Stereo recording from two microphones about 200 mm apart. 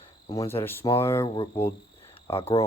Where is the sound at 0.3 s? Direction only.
30° left (ahead or behind).